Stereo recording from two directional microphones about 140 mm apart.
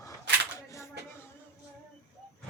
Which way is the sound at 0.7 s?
20° left (ahead or behind).